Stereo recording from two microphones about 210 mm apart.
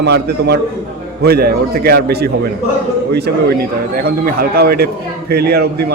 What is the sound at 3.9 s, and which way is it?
A man's voice, 45° right (ahead or behind).